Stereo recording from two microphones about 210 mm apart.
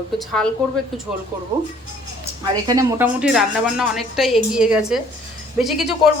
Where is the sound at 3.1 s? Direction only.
5° right (ahead or behind).